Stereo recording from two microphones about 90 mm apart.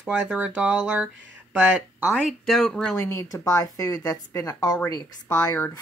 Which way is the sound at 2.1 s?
Centre (ahead or behind).